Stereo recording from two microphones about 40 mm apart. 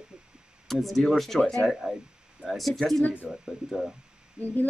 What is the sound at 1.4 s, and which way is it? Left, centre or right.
Speech, centre.